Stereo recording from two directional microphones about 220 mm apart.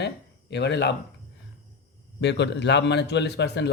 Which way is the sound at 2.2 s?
50° left (ahead or behind).